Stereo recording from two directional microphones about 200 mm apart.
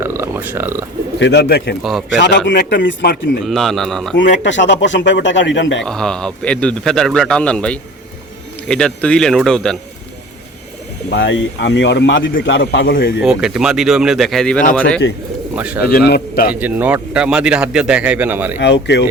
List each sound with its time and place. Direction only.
0.0 s a sound: 15° right (ahead or behind)
1.2 s speech: 55° left (ahead or behind)
1.8 s a man's voice: centre (ahead or behind)
2.1 s speech: 60° left (ahead or behind)
3.4 s a man's voice: centre (ahead or behind)
4.4 s speech: 65° left (ahead or behind)
5.8 s a man's voice: 5° left (ahead or behind)
11.1 s speech: 60° left (ahead or behind)
13.2 s a man's voice: 5° right (ahead or behind)
15.5 s a man's voice: 5° right (ahead or behind)
15.8 s a man's voice: 50° left (ahead or behind)
16.6 s a man's voice: 10° right (ahead or behind)
18.6 s speech: 60° left (ahead or behind)